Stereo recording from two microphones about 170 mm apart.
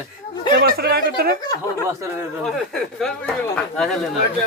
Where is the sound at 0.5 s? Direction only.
70° right (ahead or behind).